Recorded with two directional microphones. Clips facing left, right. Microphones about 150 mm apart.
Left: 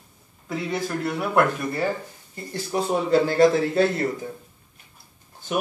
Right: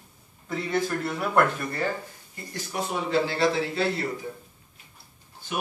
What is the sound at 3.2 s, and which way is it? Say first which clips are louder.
Speech: left 7 dB; 45° left (ahead or behind).